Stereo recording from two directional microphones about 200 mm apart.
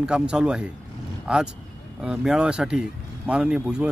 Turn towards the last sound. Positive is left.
turn(degrees=-5)  # may be behind; listen again after turning